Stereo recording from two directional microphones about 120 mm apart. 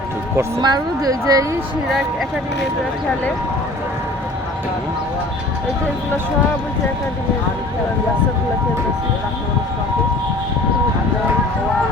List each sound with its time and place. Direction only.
0.6 s a woman's voice: 35° right (ahead or behind)